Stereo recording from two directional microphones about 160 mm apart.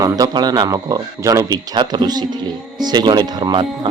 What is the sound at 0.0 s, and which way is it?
Speech, 20° right (ahead or behind).